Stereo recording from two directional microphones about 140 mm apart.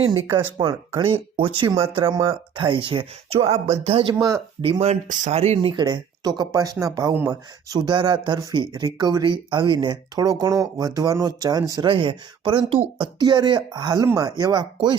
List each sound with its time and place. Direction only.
0.1 s speech: 35° right (ahead or behind)
4.1 s speech: 20° right (ahead or behind)
4.6 s speech: 45° right (ahead or behind)
5.6 s speech: 30° right (ahead or behind)
7.3 s speech: 30° right (ahead or behind)
11.9 s speech: 40° right (ahead or behind)